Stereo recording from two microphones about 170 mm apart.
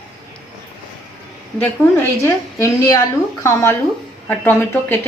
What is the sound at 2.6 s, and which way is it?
A woman's voice, 20° left (ahead or behind).